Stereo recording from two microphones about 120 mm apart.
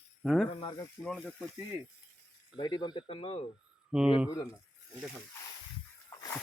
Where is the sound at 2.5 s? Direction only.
40° left (ahead or behind).